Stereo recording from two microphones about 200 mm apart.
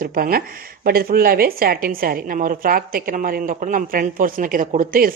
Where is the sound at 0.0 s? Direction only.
45° right (ahead or behind).